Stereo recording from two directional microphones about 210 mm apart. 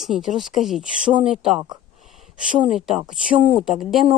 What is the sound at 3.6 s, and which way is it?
Speech, centre (ahead or behind).